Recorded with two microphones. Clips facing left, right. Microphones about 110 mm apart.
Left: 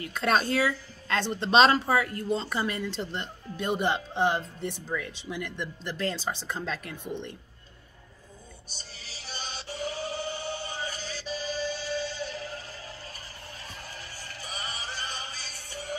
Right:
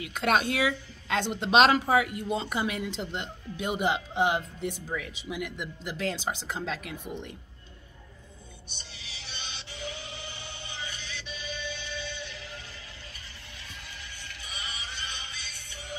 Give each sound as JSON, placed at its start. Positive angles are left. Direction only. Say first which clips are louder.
{"t": 0.0, "sound": "speech", "louder": "even", "side_deg": -10}
{"t": 9.0, "sound": "music", "louder": "left 4 dB", "side_deg": 35}
{"t": 14.1, "sound": "music", "louder": "left 4 dB", "side_deg": 35}